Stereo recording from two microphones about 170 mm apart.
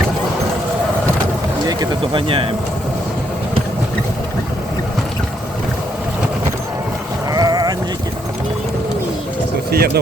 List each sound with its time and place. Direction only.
1.6 s speech: 25° right (ahead or behind)
7.3 s sheep: 20° right (ahead or behind)
9.7 s speech: 65° right (ahead or behind)